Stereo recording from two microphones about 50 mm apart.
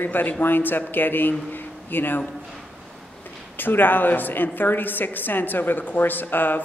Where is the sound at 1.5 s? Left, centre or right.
Left.